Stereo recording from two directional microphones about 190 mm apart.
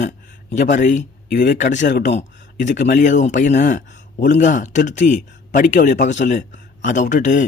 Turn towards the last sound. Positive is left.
turn(degrees=40)  # may be behind; listen again after turning